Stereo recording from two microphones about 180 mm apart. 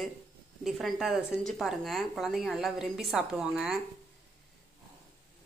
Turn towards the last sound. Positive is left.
turn(degrees=-5)  # may be behind; listen again after turning